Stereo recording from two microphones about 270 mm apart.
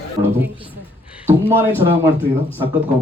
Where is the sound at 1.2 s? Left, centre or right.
Centre.